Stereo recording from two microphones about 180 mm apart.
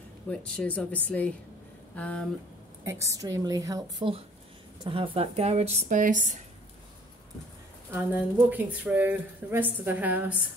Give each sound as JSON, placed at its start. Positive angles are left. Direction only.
{"t": 0.3, "sound": "speech", "side_deg": 5}
{"t": 2.8, "sound": "speech", "side_deg": -15}
{"t": 4.8, "sound": "a woman's voice", "side_deg": -30}
{"t": 7.9, "sound": "speech", "side_deg": -10}